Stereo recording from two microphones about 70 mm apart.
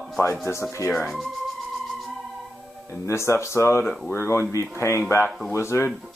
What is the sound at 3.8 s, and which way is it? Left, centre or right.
Speech, centre.